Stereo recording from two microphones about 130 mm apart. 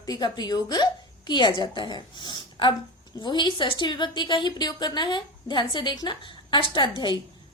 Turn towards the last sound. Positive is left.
turn(degrees=35)  # may be behind; listen again after turning